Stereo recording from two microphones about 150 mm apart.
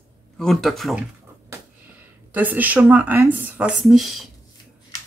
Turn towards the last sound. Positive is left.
turn(degrees=0)  # may be behind; listen again after turning